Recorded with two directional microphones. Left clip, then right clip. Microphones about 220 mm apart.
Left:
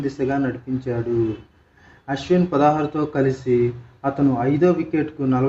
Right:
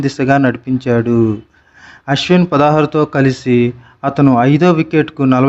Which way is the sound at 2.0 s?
35° right (ahead or behind).